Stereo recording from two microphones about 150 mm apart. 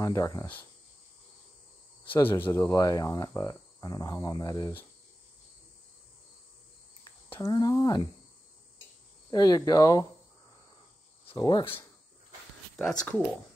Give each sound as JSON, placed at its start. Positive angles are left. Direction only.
{"t": 0.0, "sound": "speech", "side_deg": 20}
{"t": 2.2, "sound": "speech", "side_deg": 15}
{"t": 7.3, "sound": "speech", "side_deg": 25}
{"t": 9.3, "sound": "speech", "side_deg": 25}
{"t": 11.2, "sound": "speech", "side_deg": 30}
{"t": 13.0, "sound": "speech", "side_deg": 10}